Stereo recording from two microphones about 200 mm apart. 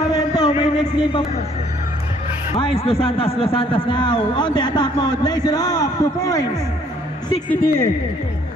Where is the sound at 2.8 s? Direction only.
30° left (ahead or behind); by 7.8 s 10° left (ahead or behind).